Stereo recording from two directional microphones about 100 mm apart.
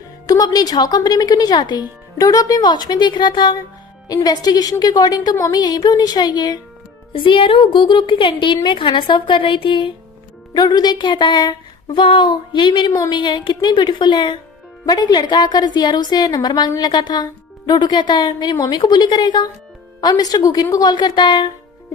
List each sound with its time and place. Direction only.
0.3 s a woman's voice: 40° left (ahead or behind)
7.1 s a woman's voice: 60° left (ahead or behind)
10.5 s a woman's voice: 45° left (ahead or behind)